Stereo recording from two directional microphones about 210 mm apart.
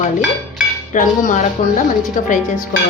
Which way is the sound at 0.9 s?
35° left (ahead or behind).